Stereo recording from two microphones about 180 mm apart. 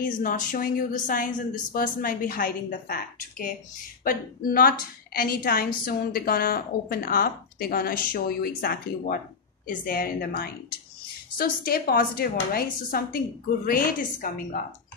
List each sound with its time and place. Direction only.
0.0 s a woman's voice: 50° left (ahead or behind)